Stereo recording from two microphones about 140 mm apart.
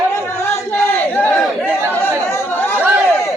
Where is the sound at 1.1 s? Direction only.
10° left (ahead or behind).